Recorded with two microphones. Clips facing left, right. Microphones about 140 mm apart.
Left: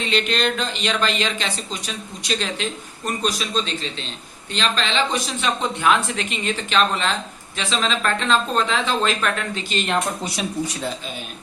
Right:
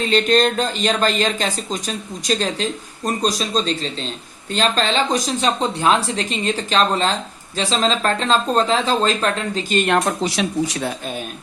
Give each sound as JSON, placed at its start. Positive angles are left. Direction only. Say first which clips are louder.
{"t": 0.0, "sound": "speech", "louder": "right 6 dB", "side_deg": -40}
{"t": 9.6, "sound": "speech", "louder": "right 6 dB", "side_deg": -55}